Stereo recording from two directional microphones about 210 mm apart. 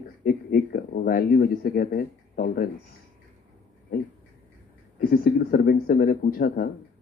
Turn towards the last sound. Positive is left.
turn(degrees=45)  # may be behind; listen again after turning